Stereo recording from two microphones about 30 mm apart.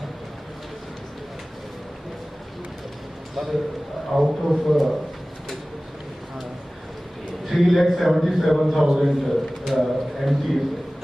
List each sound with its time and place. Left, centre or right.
4.1 s a man's voice: centre
7.4 s a man's voice: centre
8.8 s a man's voice: centre
9.0 s a man's voice: centre